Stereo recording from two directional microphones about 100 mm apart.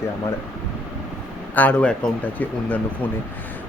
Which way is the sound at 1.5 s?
15° left (ahead or behind).